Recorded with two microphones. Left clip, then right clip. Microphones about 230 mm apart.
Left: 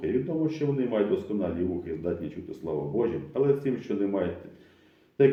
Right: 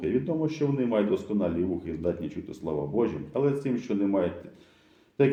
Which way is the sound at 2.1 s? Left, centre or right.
Right.